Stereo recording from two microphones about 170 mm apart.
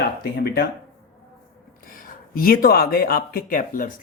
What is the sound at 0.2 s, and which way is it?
Speech, 65° left (ahead or behind).